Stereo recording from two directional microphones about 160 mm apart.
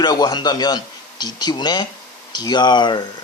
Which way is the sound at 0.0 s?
25° left (ahead or behind).